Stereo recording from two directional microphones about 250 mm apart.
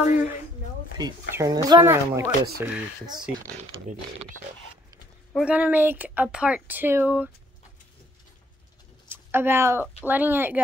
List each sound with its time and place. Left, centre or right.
0.9 s speech: centre
5.3 s speech: centre
9.1 s speech: centre